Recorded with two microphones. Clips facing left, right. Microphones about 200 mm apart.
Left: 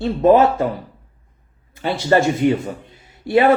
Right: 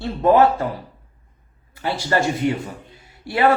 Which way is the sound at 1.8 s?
25° left (ahead or behind).